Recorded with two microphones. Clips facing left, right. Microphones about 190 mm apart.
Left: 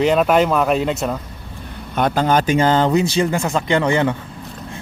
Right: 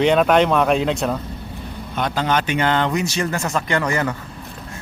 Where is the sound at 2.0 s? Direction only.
50° left (ahead or behind).